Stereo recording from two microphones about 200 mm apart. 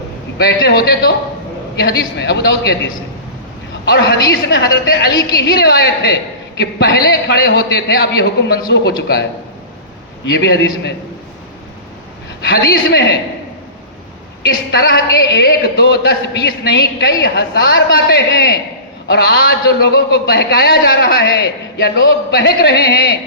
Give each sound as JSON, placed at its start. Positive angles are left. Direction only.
{"t": 0.3, "sound": "a man's voice", "side_deg": 55}
{"t": 4.4, "sound": "a man's voice", "side_deg": 55}
{"t": 10.3, "sound": "a man's voice", "side_deg": 55}
{"t": 12.4, "sound": "a man's voice", "side_deg": 55}
{"t": 14.4, "sound": "a man's voice", "side_deg": 50}